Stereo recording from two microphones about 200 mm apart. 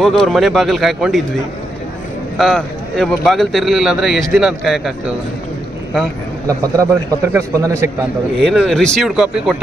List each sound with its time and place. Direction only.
0.0 s a man's voice: centre (ahead or behind)
2.3 s a man's voice: centre (ahead or behind)
6.4 s a man's voice: 15° right (ahead or behind)
8.5 s a man's voice: centre (ahead or behind)